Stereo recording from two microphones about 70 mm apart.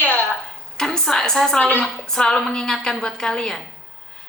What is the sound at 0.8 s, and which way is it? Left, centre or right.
A woman's voice, centre.